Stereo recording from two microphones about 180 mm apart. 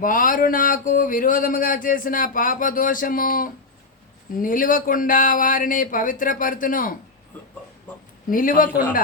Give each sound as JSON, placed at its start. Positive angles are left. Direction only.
{"t": 0.0, "sound": "speech", "side_deg": 50}
{"t": 8.3, "sound": "speech", "side_deg": 50}